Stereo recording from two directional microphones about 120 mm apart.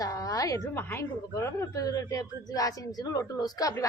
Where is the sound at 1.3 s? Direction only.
25° left (ahead or behind).